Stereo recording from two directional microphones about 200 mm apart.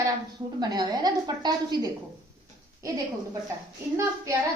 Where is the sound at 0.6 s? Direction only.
20° right (ahead or behind).